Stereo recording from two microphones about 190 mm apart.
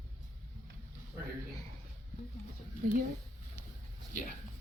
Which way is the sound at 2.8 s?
45° right (ahead or behind).